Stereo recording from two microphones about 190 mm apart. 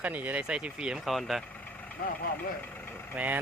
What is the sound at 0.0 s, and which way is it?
Speech, 10° right (ahead or behind).